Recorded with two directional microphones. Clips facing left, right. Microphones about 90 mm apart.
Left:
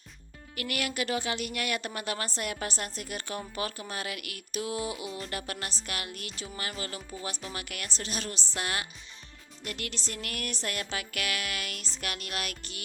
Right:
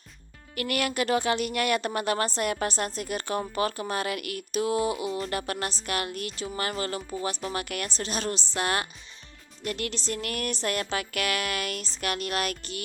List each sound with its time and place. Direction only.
0.5 s speech: 45° right (ahead or behind)